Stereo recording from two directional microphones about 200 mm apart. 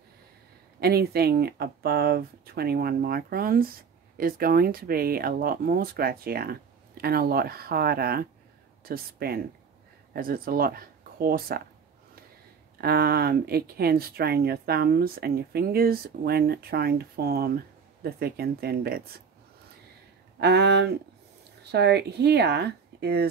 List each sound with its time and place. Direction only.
0.7 s speech: 50° right (ahead or behind)
12.7 s speech: 50° right (ahead or behind)
20.3 s speech: 55° right (ahead or behind)